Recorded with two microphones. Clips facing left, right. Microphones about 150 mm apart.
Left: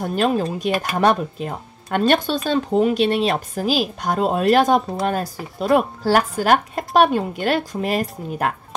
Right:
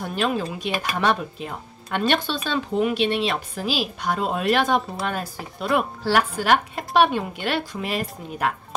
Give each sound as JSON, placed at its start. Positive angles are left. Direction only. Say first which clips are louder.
{"t": 0.0, "sound": "speech", "louder": "left 5 dB", "side_deg": 45}